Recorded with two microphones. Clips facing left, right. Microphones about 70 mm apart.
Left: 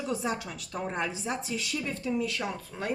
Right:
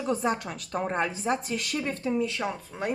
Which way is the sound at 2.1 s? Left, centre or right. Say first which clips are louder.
Right 2 dB; right.